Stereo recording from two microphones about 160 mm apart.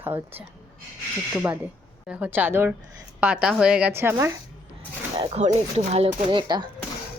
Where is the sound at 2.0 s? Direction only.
10° right (ahead or behind).